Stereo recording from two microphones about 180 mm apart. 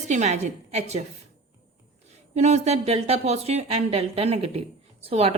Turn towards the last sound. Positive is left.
turn(degrees=-35)  # may be behind; listen again after turning